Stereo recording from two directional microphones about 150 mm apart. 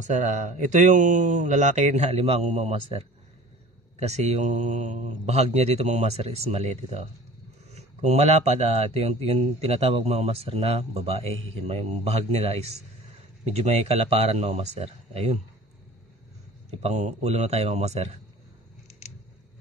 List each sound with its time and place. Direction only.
0.0 s speech: 55° right (ahead or behind)
16.8 s speech: 45° right (ahead or behind)
18.9 s scissors: 45° left (ahead or behind)